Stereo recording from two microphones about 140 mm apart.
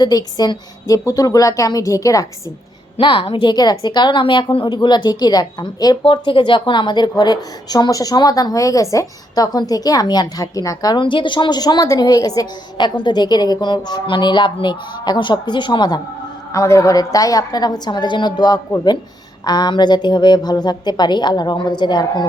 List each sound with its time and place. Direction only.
0.0 s a woman's voice: 30° left (ahead or behind)
3.0 s a woman's voice: 40° left (ahead or behind)
16.5 s a woman's voice: 20° left (ahead or behind)